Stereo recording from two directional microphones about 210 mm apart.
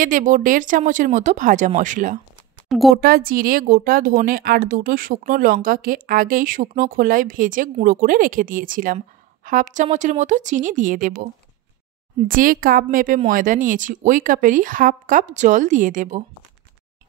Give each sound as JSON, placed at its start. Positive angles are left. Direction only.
{"t": 0.0, "sound": "a woman's voice", "side_deg": -40}
{"t": 2.7, "sound": "a woman's voice", "side_deg": 0}
{"t": 3.0, "sound": "a woman's voice", "side_deg": -45}
{"t": 12.3, "sound": "a woman's voice", "side_deg": -40}